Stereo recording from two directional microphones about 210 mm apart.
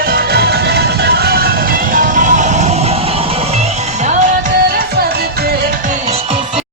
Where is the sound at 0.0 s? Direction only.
45° right (ahead or behind); by 6.6 s 25° right (ahead or behind).